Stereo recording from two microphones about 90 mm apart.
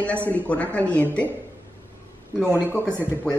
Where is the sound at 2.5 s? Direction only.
25° right (ahead or behind).